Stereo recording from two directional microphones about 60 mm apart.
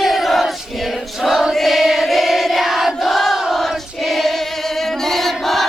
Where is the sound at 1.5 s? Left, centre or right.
Centre.